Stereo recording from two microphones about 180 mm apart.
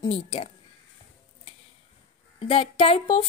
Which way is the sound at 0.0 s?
30° left (ahead or behind).